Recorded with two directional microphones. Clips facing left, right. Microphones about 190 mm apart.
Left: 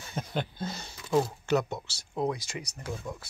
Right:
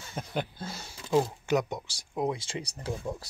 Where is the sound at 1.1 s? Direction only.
15° right (ahead or behind).